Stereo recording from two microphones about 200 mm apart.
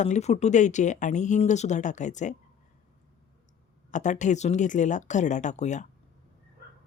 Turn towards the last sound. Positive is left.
turn(degrees=35)  # may be behind; listen again after turning